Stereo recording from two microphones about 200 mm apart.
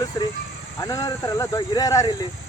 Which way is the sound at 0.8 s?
15° left (ahead or behind).